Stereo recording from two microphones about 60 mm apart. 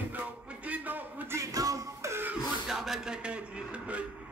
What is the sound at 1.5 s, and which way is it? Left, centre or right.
Music, right.